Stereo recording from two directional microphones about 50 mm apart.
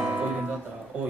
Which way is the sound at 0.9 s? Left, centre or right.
Right.